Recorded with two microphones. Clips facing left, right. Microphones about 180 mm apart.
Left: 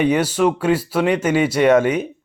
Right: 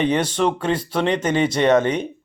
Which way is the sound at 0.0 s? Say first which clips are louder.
Left 3 dB; 10° left (ahead or behind).